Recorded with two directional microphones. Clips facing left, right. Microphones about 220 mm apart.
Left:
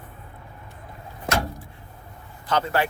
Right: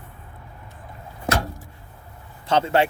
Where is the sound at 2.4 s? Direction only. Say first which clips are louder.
Right 4 dB; 25° right (ahead or behind).